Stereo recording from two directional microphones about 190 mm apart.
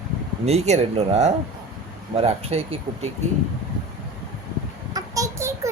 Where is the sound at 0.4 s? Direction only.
35° right (ahead or behind).